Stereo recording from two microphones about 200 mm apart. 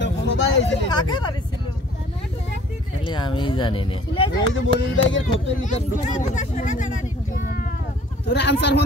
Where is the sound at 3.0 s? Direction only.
25° left (ahead or behind).